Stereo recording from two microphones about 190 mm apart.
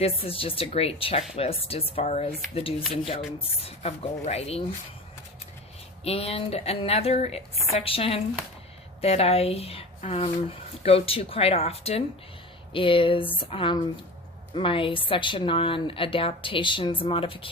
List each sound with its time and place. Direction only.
0.0 s a woman's voice: 30° left (ahead or behind)
6.1 s a woman's voice: 30° left (ahead or behind)